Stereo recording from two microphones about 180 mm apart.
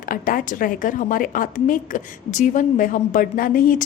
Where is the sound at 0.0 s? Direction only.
50° left (ahead or behind).